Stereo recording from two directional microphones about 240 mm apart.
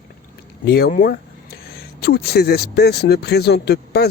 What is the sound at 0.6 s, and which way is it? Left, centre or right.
Speech, left.